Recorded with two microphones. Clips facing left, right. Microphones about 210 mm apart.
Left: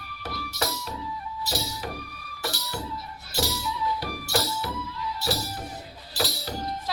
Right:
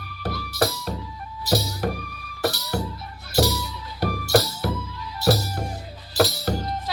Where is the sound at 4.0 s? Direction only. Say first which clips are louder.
Right 8 dB; 60° right (ahead or behind).